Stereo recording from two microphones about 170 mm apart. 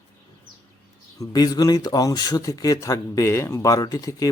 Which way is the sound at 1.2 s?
20° left (ahead or behind).